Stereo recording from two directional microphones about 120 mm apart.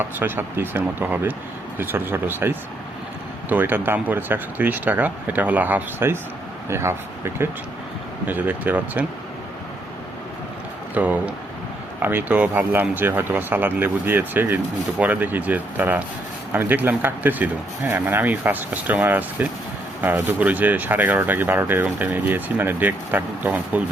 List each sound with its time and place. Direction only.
0.0 s speech: 20° right (ahead or behind)
8.3 s speech: 15° right (ahead or behind)
10.9 s speech: 15° right (ahead or behind)